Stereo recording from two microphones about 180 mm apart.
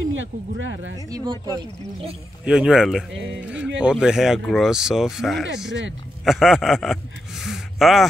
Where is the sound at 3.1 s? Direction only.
80° right.